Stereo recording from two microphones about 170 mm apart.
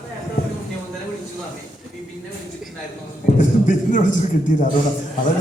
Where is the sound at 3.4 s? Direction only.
45° left (ahead or behind).